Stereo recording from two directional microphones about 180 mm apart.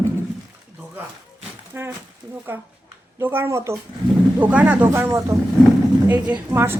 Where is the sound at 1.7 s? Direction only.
10° right (ahead or behind).